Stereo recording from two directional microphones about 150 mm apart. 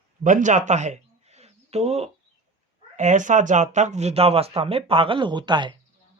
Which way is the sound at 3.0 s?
55° right (ahead or behind).